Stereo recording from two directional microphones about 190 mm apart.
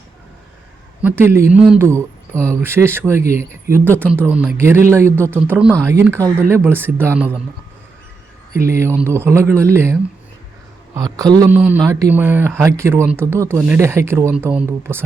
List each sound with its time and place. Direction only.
1.0 s speech: 10° right (ahead or behind)
8.6 s speech: 15° right (ahead or behind)
11.5 s speech: 5° right (ahead or behind)